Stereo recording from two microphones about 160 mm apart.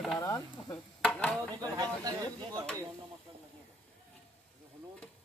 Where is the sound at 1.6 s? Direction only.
25° right (ahead or behind).